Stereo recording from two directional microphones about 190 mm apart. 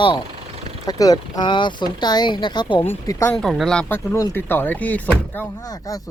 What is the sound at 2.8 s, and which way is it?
Speech, 10° left (ahead or behind).